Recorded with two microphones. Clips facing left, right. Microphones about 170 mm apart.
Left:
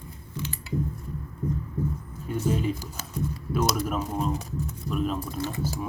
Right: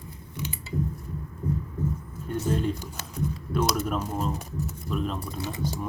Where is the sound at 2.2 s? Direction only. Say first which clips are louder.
Even; 5° left (ahead or behind).